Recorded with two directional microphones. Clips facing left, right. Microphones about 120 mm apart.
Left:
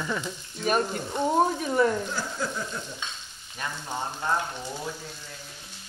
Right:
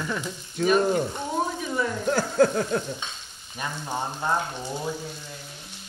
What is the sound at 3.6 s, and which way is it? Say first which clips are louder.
Frying: right 2 dB; 15° right (ahead or behind).